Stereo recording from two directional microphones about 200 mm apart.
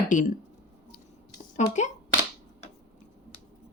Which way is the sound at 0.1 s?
40° left (ahead or behind).